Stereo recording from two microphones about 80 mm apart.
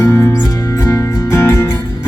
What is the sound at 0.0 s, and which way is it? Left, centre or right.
Music, left.